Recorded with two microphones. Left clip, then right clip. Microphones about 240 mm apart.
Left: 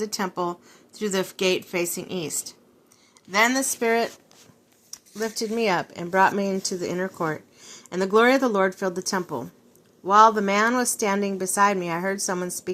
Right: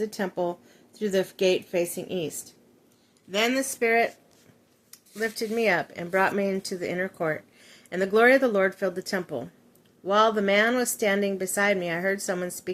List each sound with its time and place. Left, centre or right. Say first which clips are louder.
0.0 s speech: left 1 dB; centre
3.3 s speech: left 4 dB; centre
5.3 s speech: left 1 dB; centre
10.1 s speech: left 5 dB; centre